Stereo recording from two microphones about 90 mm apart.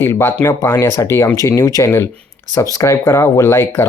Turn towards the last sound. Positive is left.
turn(degrees=25)  # may be behind; listen again after turning